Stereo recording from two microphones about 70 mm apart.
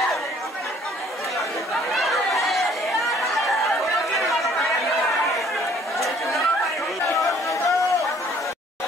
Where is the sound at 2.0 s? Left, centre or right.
Centre.